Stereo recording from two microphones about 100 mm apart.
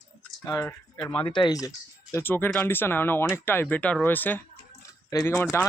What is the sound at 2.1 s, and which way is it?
Speech, 20° left (ahead or behind).